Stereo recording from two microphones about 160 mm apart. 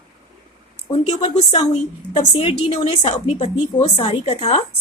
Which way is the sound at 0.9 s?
40° left (ahead or behind).